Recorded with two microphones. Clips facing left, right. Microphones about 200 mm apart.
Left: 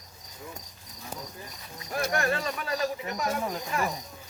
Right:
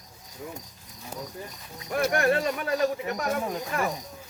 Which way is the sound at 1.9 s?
55° right (ahead or behind).